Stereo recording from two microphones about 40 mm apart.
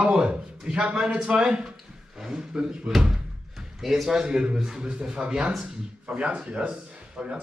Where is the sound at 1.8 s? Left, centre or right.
Centre.